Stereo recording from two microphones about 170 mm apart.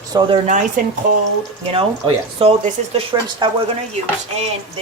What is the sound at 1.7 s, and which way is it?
Speech, 35° right (ahead or behind).